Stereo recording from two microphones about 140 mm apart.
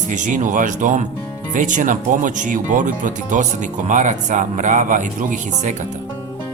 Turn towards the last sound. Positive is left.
turn(degrees=-60)  # may be behind; listen again after turning